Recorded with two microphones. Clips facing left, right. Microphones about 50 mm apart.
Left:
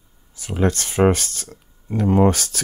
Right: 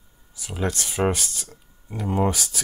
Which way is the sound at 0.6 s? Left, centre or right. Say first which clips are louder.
Left 6 dB; left.